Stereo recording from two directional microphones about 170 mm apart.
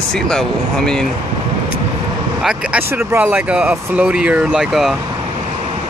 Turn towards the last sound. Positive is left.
turn(degrees=0)  # may be behind; listen again after turning